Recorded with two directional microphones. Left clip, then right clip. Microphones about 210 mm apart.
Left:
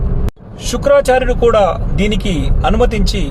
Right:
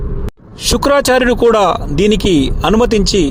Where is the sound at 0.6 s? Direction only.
45° right (ahead or behind).